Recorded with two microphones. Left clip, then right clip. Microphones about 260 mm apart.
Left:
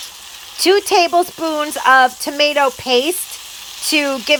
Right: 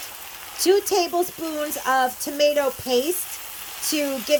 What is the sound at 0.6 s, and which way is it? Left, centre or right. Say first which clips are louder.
A woman's voice: left 7 dB; centre.